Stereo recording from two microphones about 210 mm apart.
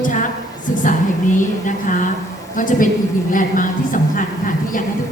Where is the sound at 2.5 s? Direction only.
40° left (ahead or behind).